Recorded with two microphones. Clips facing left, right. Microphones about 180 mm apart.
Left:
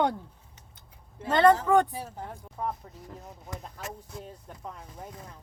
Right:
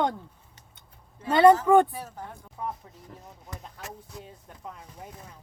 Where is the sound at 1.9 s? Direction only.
30° left (ahead or behind).